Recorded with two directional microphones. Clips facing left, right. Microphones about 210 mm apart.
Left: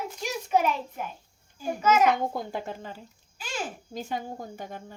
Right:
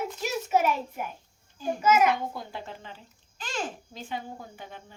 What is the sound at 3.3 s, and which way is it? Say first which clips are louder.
Babbling: right 1 dB; 10° left (ahead or behind).